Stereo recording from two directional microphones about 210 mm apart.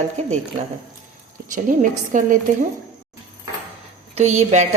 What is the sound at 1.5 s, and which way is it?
Speech, 35° right (ahead or behind).